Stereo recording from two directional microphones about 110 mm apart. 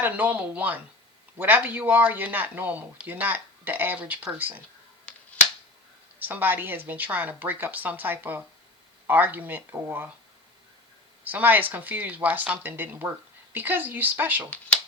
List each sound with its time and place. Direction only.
0.0 s speech: 15° right (ahead or behind)
6.1 s speech: 15° right (ahead or behind)
11.2 s speech: 15° right (ahead or behind)